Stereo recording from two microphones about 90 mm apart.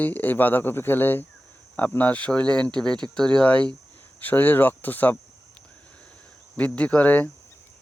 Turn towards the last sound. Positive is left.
turn(degrees=20)  # may be behind; listen again after turning